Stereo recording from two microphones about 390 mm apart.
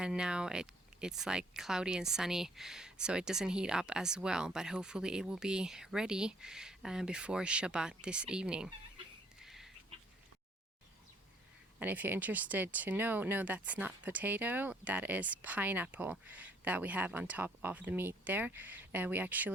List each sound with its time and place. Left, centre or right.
0.0 s speech: centre
9.4 s a sound: centre
11.8 s speech: centre